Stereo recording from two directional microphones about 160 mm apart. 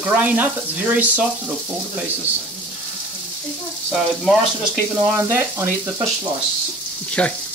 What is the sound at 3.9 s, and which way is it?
Speech, centre (ahead or behind).